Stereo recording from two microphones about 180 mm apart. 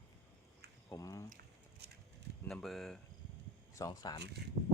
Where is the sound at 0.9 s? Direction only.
20° left (ahead or behind).